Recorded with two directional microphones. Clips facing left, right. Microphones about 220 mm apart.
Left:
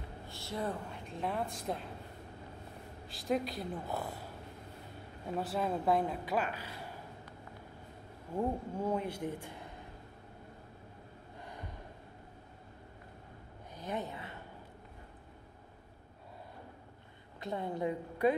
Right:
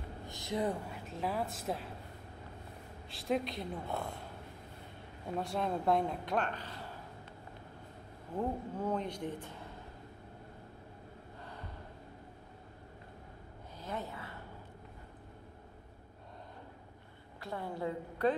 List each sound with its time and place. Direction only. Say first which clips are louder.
0.3 s a sound: right 3 dB; 15° right (ahead or behind)
1.0 s a woman's voice: even; centre (ahead or behind)
3.1 s a woman's voice: even; centre (ahead or behind)
5.3 s a woman's voice: left 1 dB; 5° left (ahead or behind)
8.4 s speech: left 2 dB; 10° left (ahead or behind)
13.7 s a sound: left 2 dB; 15° left (ahead or behind)
17.4 s a woman's voice: left 3 dB; 20° left (ahead or behind)